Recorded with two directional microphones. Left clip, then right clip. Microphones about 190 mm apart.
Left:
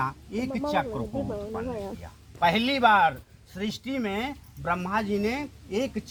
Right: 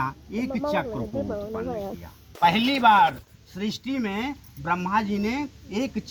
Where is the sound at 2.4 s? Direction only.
35° left (ahead or behind).